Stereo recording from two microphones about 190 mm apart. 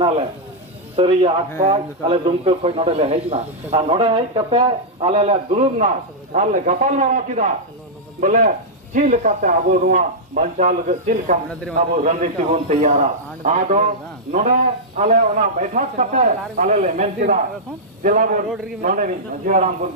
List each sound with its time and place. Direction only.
0.9 s a man's voice: 30° right (ahead or behind)
14.9 s a man's voice: 40° right (ahead or behind)